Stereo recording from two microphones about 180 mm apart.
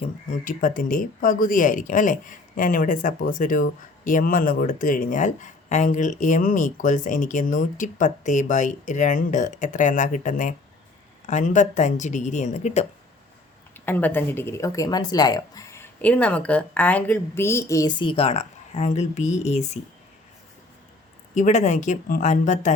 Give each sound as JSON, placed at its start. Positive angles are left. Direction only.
{"t": 0.4, "sound": "speech", "side_deg": 50}
{"t": 13.7, "sound": "speech", "side_deg": 10}
{"t": 21.3, "sound": "speech", "side_deg": 40}